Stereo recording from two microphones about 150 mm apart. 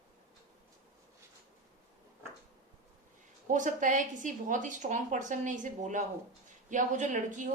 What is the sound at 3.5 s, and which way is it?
A woman's voice, 60° right (ahead or behind).